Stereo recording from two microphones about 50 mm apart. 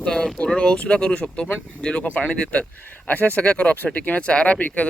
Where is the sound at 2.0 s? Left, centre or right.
Left.